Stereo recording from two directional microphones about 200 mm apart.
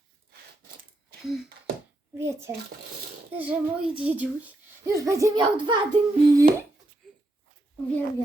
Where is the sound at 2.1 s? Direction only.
15° right (ahead or behind).